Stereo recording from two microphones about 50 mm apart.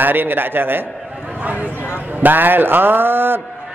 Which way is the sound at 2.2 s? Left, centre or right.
Right.